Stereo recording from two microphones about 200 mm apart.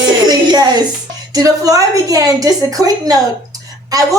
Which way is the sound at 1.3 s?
20° right (ahead or behind).